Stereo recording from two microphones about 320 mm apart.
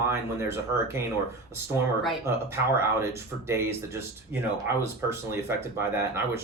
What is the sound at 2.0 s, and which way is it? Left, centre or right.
Speech, centre.